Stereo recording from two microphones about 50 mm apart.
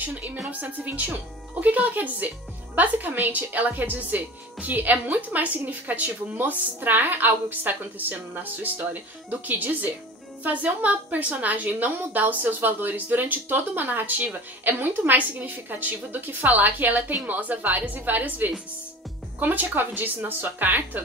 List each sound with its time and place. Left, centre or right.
0.0 s speech: right